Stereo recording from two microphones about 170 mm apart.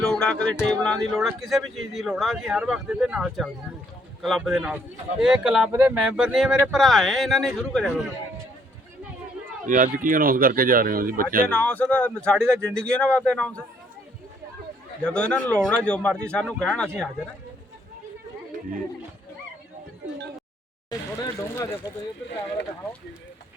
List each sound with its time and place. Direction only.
0.0 s speech: 5° left (ahead or behind)
9.6 s speech: 50° right (ahead or behind)
11.4 s speech: 5° left (ahead or behind)
15.0 s speech: 5° left (ahead or behind)
21.2 s speech: 20° left (ahead or behind)